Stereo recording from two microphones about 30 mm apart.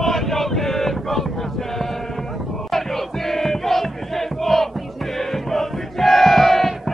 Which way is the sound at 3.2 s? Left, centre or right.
Centre.